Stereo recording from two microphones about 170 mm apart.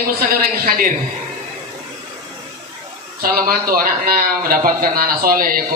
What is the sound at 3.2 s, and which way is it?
A man's voice, 55° right (ahead or behind).